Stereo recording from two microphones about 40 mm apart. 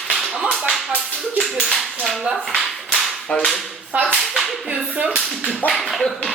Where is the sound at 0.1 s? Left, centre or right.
Centre.